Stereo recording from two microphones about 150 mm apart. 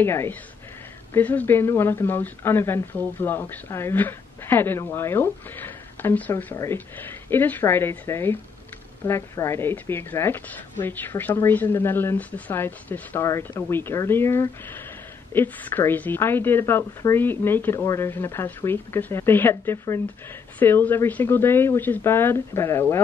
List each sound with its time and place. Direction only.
0.0 s a woman's voice: 15° left (ahead or behind)